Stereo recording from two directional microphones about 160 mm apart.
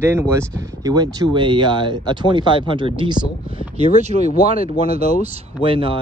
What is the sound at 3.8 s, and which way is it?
Speech, 45° right (ahead or behind).